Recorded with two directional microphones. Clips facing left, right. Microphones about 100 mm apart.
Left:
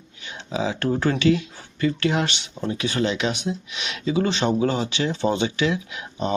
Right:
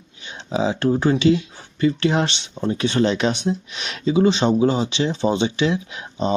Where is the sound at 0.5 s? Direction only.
25° right (ahead or behind).